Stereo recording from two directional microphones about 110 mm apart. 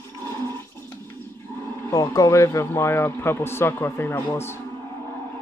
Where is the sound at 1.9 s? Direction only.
30° left (ahead or behind).